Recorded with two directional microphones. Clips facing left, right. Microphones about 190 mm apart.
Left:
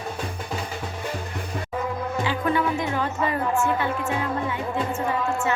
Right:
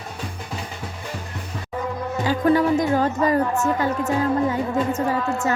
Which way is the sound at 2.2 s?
40° right (ahead or behind).